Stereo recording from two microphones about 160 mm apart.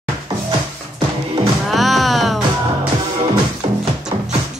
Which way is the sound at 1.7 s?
Centre (ahead or behind).